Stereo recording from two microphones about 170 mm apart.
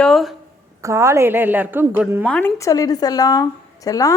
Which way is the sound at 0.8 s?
15° right (ahead or behind).